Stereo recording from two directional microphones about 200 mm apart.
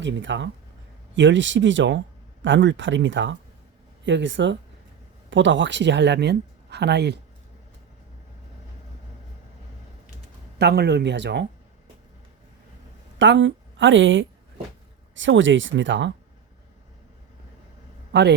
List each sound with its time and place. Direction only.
0.0 s speech: 65° right (ahead or behind)
10.6 s speech: 55° right (ahead or behind)
13.1 s a woman's voice: 65° right (ahead or behind)
18.1 s a man's voice: 60° right (ahead or behind)